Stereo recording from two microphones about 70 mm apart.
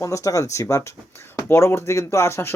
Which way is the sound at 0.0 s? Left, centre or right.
Left.